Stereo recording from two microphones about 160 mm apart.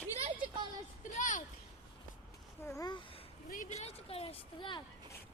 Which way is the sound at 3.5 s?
50° left (ahead or behind).